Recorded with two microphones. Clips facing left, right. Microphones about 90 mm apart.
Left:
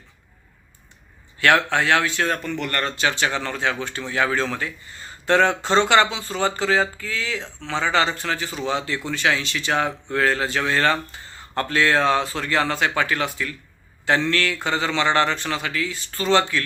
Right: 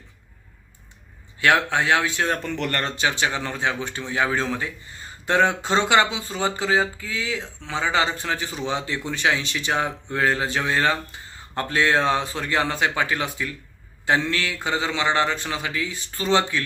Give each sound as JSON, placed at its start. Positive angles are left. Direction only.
{"t": 1.4, "sound": "speech", "side_deg": -10}
{"t": 2.3, "sound": "speech", "side_deg": -35}
{"t": 3.0, "sound": "speech", "side_deg": -10}